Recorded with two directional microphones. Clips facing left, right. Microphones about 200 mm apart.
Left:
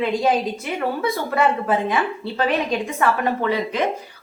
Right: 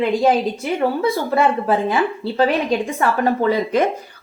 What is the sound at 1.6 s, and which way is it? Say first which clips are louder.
A woman's voice: right 3 dB; 30° right (ahead or behind).